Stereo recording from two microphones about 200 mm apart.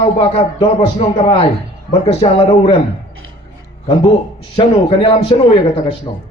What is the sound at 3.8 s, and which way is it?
A man's voice, 25° left (ahead or behind).